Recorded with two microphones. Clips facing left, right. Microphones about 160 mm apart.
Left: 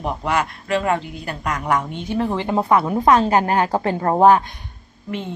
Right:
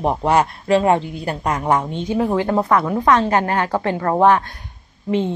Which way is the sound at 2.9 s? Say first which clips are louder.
Left 1 dB; 15° left (ahead or behind).